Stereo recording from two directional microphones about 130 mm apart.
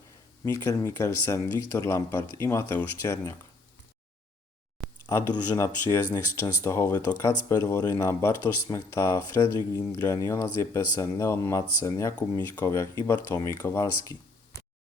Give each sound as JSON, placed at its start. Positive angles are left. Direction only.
{"t": 0.4, "sound": "speech", "side_deg": 25}
{"t": 5.3, "sound": "speech", "side_deg": 20}